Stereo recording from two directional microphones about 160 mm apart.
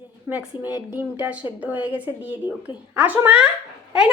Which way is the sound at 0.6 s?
10° right (ahead or behind).